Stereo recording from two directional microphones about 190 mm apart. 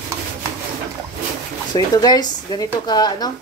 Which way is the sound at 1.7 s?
20° left (ahead or behind).